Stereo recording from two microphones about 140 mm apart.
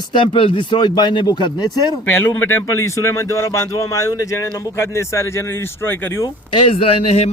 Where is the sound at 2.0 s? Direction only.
15° left (ahead or behind).